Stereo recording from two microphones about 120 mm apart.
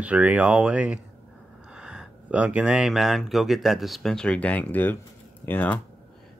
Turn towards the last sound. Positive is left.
turn(degrees=15)  # may be behind; listen again after turning